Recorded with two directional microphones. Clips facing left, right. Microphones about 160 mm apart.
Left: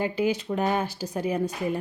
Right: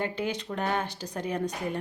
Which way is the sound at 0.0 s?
10° left (ahead or behind).